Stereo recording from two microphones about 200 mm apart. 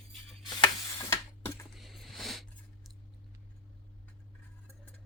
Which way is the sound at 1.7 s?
Centre (ahead or behind).